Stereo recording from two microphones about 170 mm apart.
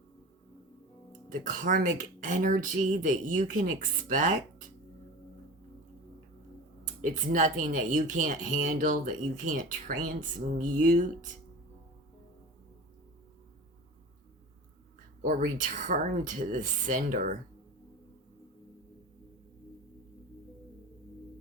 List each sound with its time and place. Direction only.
1.3 s speech: 50° right (ahead or behind)
6.8 s speech: 50° right (ahead or behind)
15.2 s speech: 50° right (ahead or behind)